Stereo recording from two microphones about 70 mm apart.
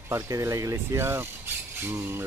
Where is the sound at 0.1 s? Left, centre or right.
Right.